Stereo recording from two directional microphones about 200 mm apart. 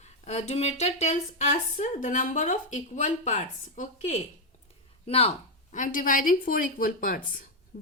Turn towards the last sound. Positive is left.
turn(degrees=45)  # may be behind; listen again after turning